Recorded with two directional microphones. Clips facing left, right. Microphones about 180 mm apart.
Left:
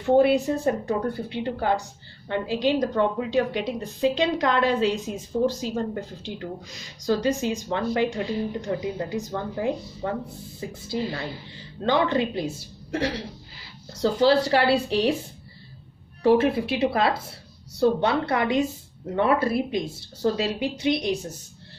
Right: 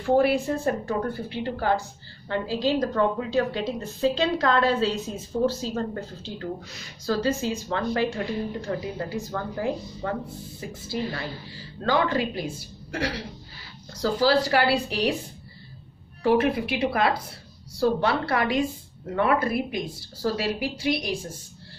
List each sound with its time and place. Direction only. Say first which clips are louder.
0.0 s speech: left 2 dB; 20° left (ahead or behind)
16.2 s speech: left 2 dB; 25° left (ahead or behind)